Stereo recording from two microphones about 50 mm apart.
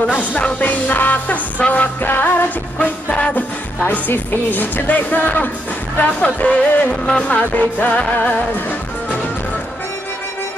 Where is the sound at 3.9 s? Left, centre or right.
Left.